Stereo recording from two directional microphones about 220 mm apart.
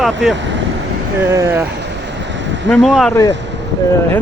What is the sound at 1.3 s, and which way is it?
Speech, 10° right (ahead or behind).